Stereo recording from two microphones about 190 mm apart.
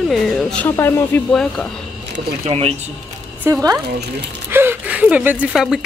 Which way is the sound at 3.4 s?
15° right (ahead or behind).